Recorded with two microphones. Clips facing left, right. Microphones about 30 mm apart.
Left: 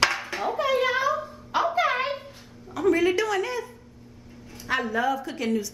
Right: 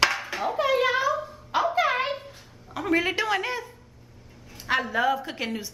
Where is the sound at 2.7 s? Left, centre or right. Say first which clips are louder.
Left 3 dB; right.